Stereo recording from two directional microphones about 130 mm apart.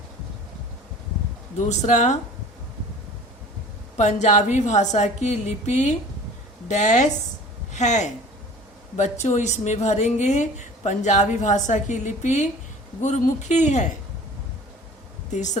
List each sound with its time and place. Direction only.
1.6 s speech: 65° left (ahead or behind)
3.9 s a woman's voice: 65° left (ahead or behind)